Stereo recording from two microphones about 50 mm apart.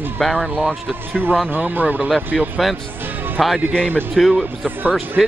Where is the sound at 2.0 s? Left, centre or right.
Centre.